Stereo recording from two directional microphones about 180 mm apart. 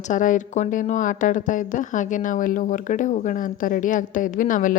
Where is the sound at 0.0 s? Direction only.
45° left (ahead or behind).